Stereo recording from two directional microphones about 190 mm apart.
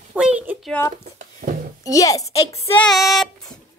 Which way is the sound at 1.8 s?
20° left (ahead or behind).